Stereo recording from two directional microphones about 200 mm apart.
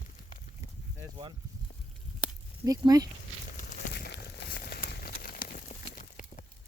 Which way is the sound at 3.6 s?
40° left (ahead or behind).